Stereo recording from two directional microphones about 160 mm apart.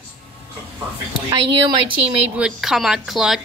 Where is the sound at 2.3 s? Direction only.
5° right (ahead or behind).